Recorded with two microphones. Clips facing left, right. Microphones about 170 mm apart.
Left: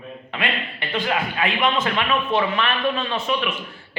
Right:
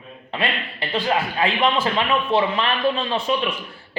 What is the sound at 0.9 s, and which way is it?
A man's voice, 30° right (ahead or behind).